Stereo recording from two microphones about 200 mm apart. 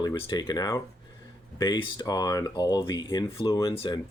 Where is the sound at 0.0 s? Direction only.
20° left (ahead or behind).